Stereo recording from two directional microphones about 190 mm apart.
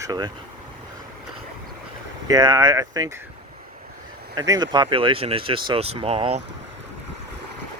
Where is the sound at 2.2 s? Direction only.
20° right (ahead or behind).